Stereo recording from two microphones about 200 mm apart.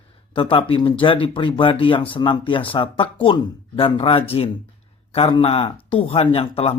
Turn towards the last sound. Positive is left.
turn(degrees=30)  # may be behind; listen again after turning